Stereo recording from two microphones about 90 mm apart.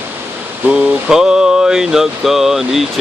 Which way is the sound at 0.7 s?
5° right (ahead or behind).